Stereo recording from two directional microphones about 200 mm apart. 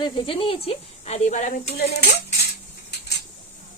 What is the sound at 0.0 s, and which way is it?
Speech, 25° left (ahead or behind).